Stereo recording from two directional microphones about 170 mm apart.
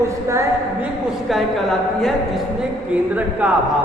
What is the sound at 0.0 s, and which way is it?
Speech, 15° right (ahead or behind).